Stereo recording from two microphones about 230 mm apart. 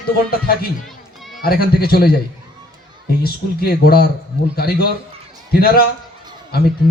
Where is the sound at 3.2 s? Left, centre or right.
Left.